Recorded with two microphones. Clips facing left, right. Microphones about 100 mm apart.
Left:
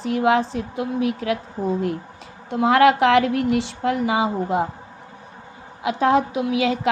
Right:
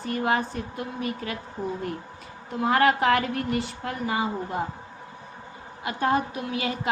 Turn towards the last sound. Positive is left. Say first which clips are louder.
# left 9 dB
turn(degrees=90)